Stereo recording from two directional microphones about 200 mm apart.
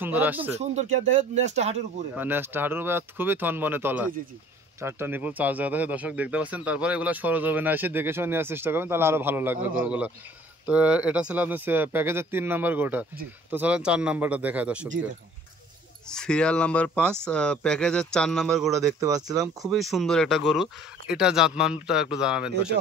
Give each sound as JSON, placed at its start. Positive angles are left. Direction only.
{"t": 0.0, "sound": "speech", "side_deg": -10}
{"t": 1.1, "sound": "speech", "side_deg": -35}
{"t": 2.1, "sound": "speech", "side_deg": -10}
{"t": 16.1, "sound": "speech", "side_deg": 5}
{"t": 18.9, "sound": "speech", "side_deg": -15}
{"t": 19.7, "sound": "speech", "side_deg": 0}